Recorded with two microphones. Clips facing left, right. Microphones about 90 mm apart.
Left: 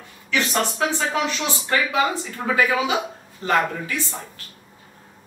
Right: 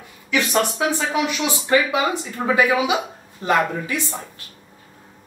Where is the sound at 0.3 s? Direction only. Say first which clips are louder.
Right 3 dB; 15° right (ahead or behind).